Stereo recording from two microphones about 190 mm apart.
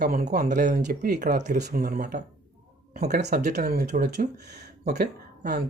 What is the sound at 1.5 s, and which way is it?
Speech, 55° right (ahead or behind).